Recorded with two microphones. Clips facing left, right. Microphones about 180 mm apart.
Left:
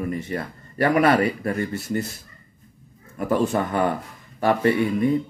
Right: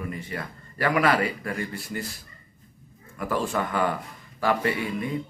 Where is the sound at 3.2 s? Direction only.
25° left (ahead or behind).